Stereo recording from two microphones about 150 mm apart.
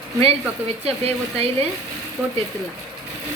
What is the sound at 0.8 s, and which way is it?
Speech, 45° right (ahead or behind).